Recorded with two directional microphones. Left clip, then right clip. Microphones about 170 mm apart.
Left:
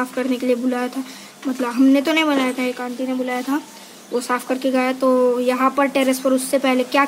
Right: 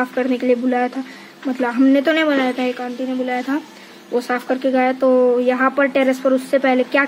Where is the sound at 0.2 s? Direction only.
Centre (ahead or behind).